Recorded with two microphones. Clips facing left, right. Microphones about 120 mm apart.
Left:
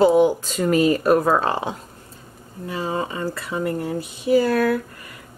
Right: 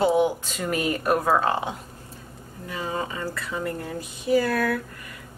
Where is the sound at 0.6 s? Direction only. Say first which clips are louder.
Left 8 dB; 30° left (ahead or behind).